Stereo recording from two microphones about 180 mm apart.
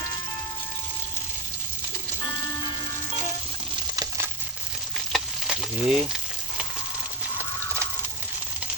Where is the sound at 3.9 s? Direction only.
20° right (ahead or behind).